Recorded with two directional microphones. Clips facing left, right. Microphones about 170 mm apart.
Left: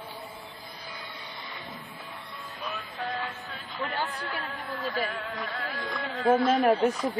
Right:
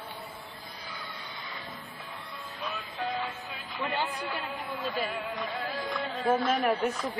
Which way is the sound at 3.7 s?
10° right (ahead or behind).